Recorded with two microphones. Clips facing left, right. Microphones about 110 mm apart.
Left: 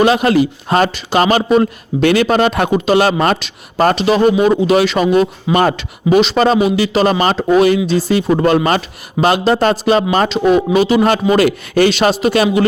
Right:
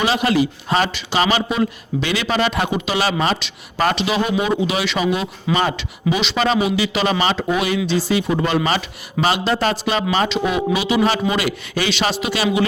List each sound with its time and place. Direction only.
0.0 s a man's voice: 50° left (ahead or behind)